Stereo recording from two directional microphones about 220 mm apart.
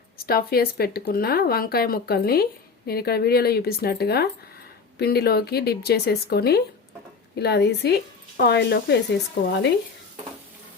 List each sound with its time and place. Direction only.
0.3 s speech: 45° left (ahead or behind)